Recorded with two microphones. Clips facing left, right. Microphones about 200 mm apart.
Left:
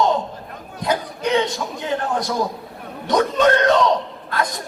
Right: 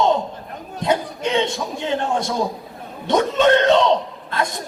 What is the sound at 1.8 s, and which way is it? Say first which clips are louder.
A man's voice: right 1 dB; 25° right (ahead or behind).